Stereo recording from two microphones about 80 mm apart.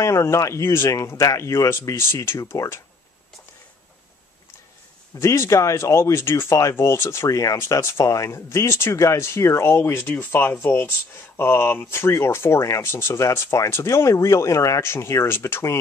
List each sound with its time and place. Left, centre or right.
0.0 s speech: left
5.2 s speech: left